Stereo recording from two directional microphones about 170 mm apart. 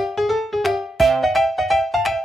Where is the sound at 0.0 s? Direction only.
Centre (ahead or behind).